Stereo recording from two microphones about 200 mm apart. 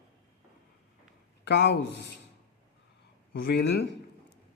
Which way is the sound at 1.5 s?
60° left (ahead or behind).